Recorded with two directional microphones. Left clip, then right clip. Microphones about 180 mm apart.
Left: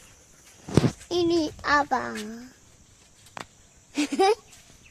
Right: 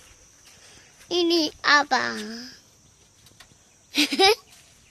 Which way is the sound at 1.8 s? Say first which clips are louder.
Right 3 dB; 15° right (ahead or behind).